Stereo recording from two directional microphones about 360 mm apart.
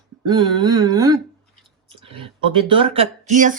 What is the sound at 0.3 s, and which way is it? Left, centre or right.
Speech, centre.